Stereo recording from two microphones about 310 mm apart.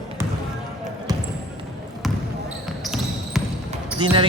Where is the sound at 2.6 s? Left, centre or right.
Centre.